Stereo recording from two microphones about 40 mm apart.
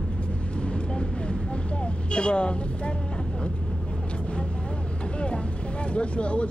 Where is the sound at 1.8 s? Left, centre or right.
Left.